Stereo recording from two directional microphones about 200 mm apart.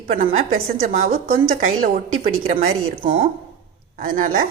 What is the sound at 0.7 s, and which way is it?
A woman's voice, 45° right (ahead or behind).